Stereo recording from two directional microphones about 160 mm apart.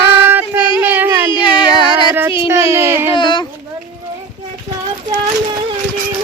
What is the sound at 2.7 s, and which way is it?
Child singing, 15° right (ahead or behind).